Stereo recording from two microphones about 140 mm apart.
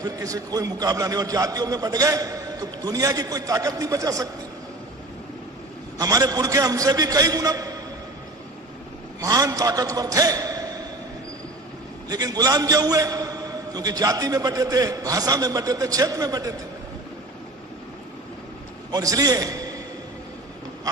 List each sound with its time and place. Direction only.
0.0 s a man's voice: 25° right (ahead or behind)
6.0 s a man's voice: 25° right (ahead or behind)
9.2 s a man's voice: 25° right (ahead or behind)
12.0 s a man's voice: 25° right (ahead or behind)
18.9 s a man's voice: 25° right (ahead or behind)